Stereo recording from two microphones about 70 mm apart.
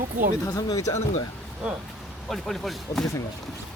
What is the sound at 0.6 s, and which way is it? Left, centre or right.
Speech, left.